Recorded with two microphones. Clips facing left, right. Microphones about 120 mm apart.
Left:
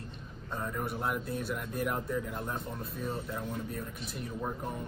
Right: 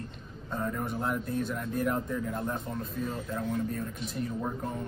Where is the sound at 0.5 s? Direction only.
Centre (ahead or behind).